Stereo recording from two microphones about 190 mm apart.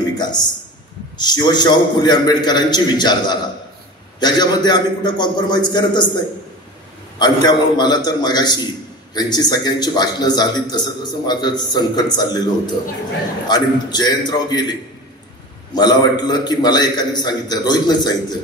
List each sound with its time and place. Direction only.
0.0 s a sound: 20° left (ahead or behind)
1.1 s a man's voice: 20° left (ahead or behind)
7.4 s a man's voice: 20° left (ahead or behind)